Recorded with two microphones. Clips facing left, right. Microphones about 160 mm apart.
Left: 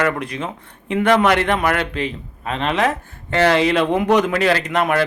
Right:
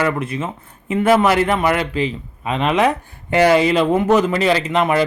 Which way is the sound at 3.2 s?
10° right (ahead or behind).